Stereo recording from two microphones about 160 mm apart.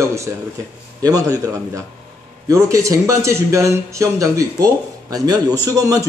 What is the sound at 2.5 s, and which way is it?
A man's voice, 20° right (ahead or behind).